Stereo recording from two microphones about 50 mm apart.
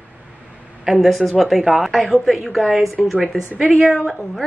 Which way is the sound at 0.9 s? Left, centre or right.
Centre.